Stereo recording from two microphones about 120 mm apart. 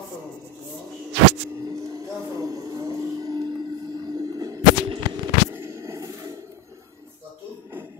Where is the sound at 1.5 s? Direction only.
30° right (ahead or behind).